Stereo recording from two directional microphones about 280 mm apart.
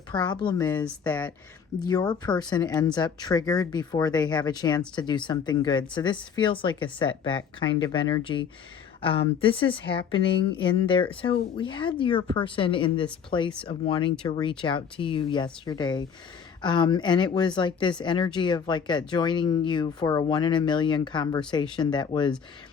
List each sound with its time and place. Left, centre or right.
0.1 s speech: centre